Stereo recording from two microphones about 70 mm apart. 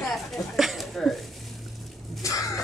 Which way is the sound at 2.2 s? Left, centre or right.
Left.